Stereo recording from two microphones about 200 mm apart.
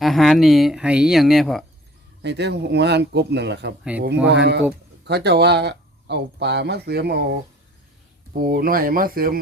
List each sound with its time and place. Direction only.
0.0 s speech: centre (ahead or behind)
2.2 s speech: 55° right (ahead or behind)